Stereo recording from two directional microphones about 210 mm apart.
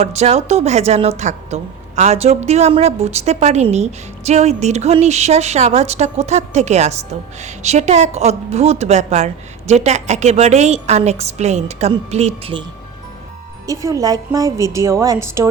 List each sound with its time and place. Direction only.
0.0 s a woman's voice: 30° right (ahead or behind)
13.7 s a woman's voice: 15° right (ahead or behind)